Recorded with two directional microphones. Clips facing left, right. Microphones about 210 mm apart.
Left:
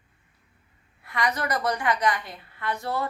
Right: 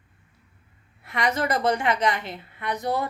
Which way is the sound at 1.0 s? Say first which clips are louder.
Right 3 dB; 25° right (ahead or behind).